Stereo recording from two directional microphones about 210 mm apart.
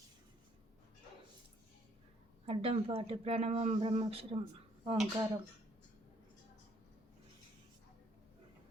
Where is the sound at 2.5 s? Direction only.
25° right (ahead or behind).